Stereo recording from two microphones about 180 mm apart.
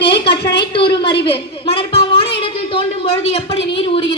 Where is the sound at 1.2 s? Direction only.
30° left (ahead or behind).